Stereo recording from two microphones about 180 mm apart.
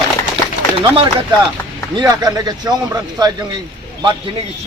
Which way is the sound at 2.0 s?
20° right (ahead or behind).